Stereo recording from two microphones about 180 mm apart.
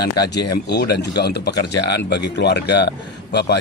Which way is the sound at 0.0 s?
60° left (ahead or behind).